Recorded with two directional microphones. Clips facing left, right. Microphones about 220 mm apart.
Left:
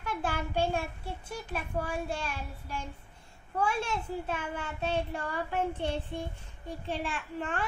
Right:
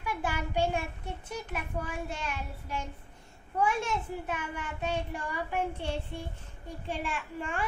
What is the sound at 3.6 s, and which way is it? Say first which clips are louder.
A child's voice: right 1 dB; 15° right (ahead or behind).